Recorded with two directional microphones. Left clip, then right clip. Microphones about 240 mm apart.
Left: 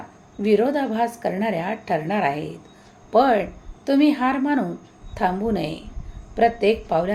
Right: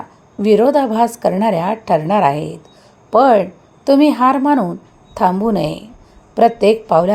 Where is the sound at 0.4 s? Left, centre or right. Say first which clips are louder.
Right 8 dB; right.